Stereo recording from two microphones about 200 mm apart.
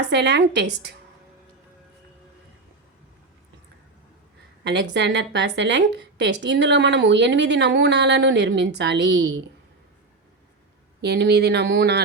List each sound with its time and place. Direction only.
0.0 s a woman's voice: 60° right (ahead or behind)
4.6 s a woman's voice: 60° right (ahead or behind)
11.0 s a woman's voice: 55° right (ahead or behind)